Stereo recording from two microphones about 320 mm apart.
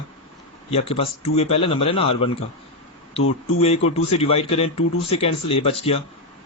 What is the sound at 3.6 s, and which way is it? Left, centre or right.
A man's voice, centre.